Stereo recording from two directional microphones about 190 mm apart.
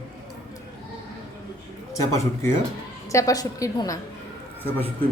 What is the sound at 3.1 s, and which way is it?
Speech, 15° left (ahead or behind).